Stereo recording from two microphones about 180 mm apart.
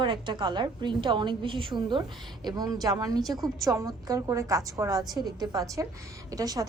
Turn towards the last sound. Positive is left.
turn(degrees=-20)  # may be behind; listen again after turning